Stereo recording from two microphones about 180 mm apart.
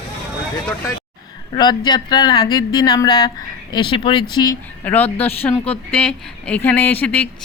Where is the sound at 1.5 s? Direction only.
25° left (ahead or behind).